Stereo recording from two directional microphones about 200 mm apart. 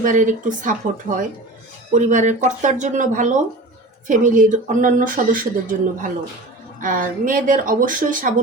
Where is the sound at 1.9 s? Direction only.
40° right (ahead or behind).